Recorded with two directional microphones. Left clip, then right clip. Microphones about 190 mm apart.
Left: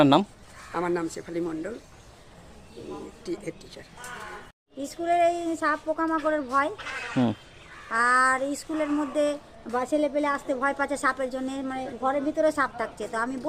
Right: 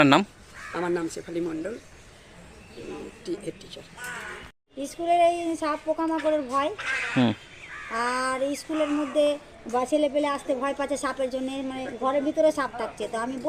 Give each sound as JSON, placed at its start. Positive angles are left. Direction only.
{"t": 0.0, "sound": "speech", "side_deg": 10}
{"t": 5.0, "sound": "a woman's voice", "side_deg": 5}
{"t": 7.9, "sound": "a sound", "side_deg": 30}
{"t": 8.7, "sound": "a woman's voice", "side_deg": 5}